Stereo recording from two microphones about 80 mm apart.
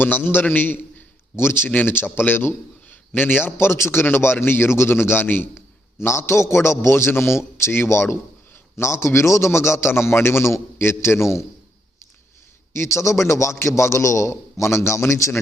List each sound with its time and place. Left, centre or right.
0.0 s a man's voice: left
12.7 s a man's voice: left